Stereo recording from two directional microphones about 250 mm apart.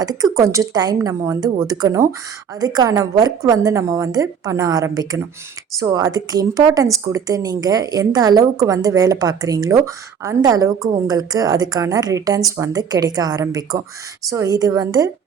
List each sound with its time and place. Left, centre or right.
0.0 s a woman's voice: centre